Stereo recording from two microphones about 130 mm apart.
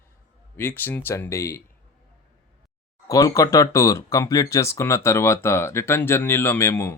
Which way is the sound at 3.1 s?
25° left (ahead or behind).